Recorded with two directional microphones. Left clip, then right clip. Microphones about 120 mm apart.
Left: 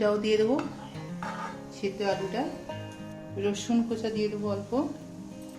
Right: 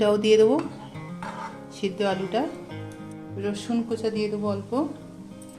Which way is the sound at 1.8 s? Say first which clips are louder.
Right 4 dB; 90° right.